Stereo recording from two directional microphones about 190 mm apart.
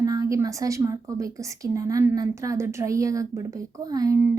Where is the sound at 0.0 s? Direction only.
20° right (ahead or behind).